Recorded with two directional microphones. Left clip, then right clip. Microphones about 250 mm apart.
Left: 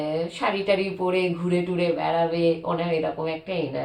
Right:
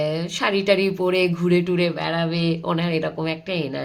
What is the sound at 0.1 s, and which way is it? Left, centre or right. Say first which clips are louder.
Speech: right 2 dB; right.